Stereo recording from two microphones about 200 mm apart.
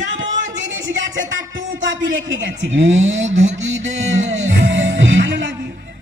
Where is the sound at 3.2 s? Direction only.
35° right (ahead or behind).